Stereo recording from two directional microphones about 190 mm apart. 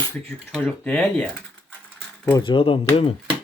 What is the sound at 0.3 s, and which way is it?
Speech, 5° left (ahead or behind).